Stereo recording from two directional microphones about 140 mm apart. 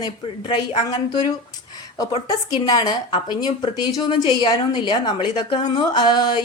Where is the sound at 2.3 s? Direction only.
25° left (ahead or behind).